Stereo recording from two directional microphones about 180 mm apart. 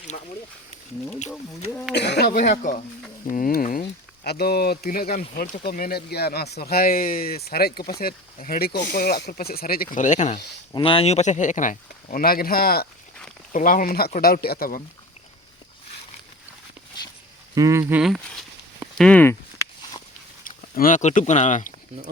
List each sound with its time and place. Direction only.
2.0 s speech: 65° left (ahead or behind)
3.2 s speech: 50° left (ahead or behind)
10.7 s speech: 30° left (ahead or behind); by 12.9 s 55° left (ahead or behind)
13.5 s speech: 45° left (ahead or behind)
17.5 s speech: 15° right (ahead or behind)
18.9 s speech: 5° left (ahead or behind)
20.4 s speech: 50° left (ahead or behind)